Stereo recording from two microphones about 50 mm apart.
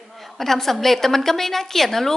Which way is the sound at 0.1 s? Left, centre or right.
Centre.